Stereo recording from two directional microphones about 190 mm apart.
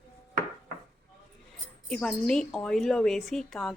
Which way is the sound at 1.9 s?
5° left (ahead or behind).